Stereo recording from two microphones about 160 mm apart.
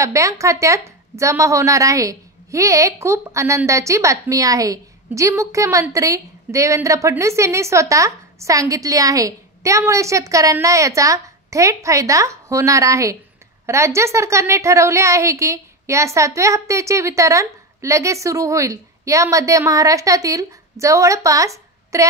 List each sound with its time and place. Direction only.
0.0 s a woman's voice: 20° right (ahead or behind)